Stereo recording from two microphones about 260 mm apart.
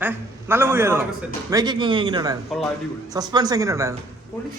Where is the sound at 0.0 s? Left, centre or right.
Centre.